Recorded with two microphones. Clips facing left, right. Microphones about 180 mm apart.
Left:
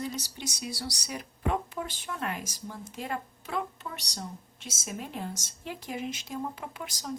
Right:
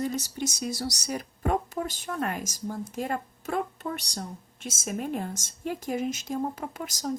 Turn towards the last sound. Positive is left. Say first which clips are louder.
# right 5 dB
turn(degrees=-45)  # may be behind; listen again after turning